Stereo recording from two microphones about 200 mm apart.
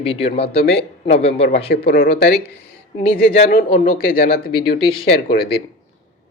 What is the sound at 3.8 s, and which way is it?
Speech, 45° left (ahead or behind).